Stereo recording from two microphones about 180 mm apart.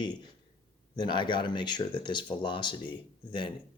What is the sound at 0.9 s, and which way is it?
Speech, 25° left (ahead or behind).